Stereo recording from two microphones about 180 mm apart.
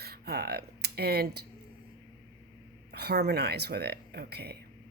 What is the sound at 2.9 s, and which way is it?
A woman's voice, 65° right (ahead or behind).